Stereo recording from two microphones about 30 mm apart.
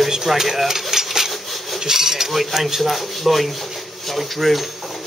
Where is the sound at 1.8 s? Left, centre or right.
Centre.